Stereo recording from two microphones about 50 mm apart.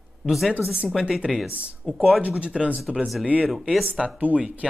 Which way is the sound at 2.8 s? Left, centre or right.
Centre.